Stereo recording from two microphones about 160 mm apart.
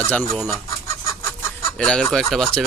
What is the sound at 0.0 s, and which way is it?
Speech, 10° left (ahead or behind).